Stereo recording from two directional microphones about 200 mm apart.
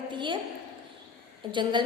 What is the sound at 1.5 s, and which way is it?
Speech, 25° right (ahead or behind).